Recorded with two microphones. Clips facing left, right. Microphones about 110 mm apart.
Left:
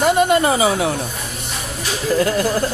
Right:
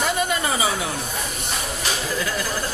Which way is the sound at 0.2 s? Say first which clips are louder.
Left 9 dB; 60° left (ahead or behind).